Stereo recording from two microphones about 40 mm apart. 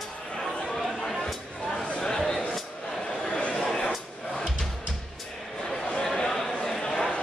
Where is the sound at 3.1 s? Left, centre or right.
Left.